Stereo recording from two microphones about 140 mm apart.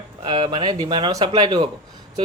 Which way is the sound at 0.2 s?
35° right (ahead or behind).